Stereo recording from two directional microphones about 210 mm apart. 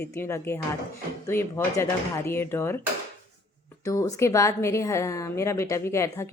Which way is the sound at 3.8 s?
15° left (ahead or behind).